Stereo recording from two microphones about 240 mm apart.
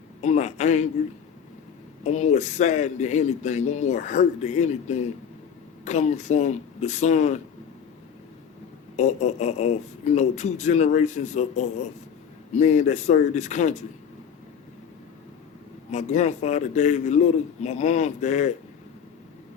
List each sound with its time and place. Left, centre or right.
0.2 s a sound: left
2.0 s speech: left
9.0 s speech: left
15.9 s speech: left